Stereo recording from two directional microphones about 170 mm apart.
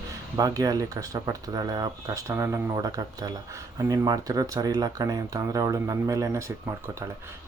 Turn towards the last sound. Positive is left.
turn(degrees=-15)  # may be behind; listen again after turning